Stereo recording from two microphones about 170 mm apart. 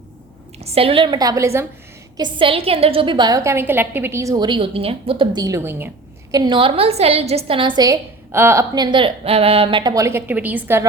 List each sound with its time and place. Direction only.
0.6 s a woman's voice: 35° right (ahead or behind); by 1.6 s 15° right (ahead or behind)
2.1 s a woman's voice: 30° right (ahead or behind)
6.3 s a woman's voice: 25° right (ahead or behind)
7.8 s a woman's voice: 15° right (ahead or behind)